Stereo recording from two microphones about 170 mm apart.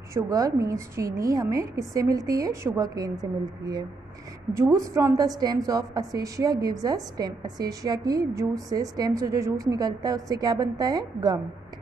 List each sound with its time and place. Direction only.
0.1 s a woman's voice: 20° right (ahead or behind)